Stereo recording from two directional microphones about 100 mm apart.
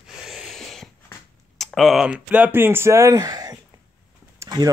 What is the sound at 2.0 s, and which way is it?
Speech, 15° right (ahead or behind).